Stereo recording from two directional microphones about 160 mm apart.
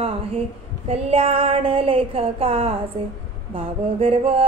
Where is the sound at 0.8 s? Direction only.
40° right (ahead or behind).